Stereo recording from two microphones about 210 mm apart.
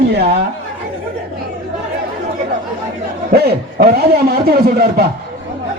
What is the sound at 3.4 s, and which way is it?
A man's voice, 50° right (ahead or behind).